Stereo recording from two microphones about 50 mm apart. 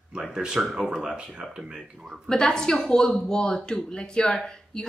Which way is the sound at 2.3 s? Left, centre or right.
Centre.